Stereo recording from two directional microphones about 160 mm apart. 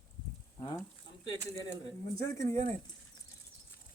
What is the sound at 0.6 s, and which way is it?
Speech, 25° left (ahead or behind).